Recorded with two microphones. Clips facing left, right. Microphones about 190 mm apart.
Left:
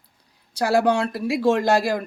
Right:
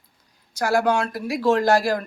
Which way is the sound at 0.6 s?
30° left (ahead or behind).